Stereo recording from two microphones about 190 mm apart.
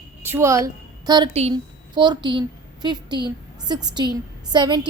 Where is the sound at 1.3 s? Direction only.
35° right (ahead or behind).